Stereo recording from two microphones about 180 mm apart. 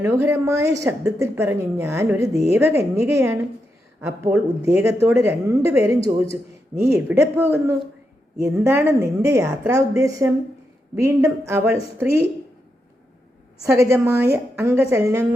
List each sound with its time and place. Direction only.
0.0 s a woman's voice: 15° right (ahead or behind)
13.7 s a woman's voice: 15° right (ahead or behind)